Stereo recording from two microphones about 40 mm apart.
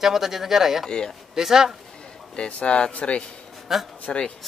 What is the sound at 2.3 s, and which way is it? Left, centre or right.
Speech, left.